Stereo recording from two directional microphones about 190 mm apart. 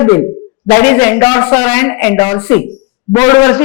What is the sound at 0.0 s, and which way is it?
A man's voice, 20° left (ahead or behind).